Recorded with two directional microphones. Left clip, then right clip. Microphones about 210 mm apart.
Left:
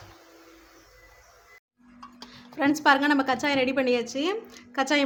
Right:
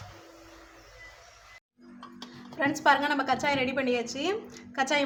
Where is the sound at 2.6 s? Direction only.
40° left (ahead or behind).